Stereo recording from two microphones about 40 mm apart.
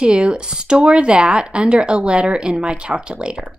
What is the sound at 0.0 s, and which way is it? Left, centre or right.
Speech, right.